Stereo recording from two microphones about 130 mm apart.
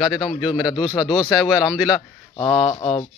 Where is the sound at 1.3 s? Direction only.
5° right (ahead or behind).